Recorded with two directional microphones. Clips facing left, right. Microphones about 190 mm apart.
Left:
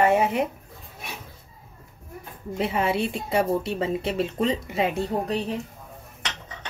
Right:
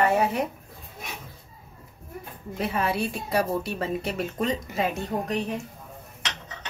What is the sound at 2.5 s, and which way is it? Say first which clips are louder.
A woman's voice: left 2 dB; 25° left (ahead or behind).